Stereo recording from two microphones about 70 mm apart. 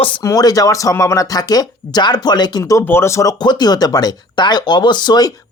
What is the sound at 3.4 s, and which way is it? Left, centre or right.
Speech, left.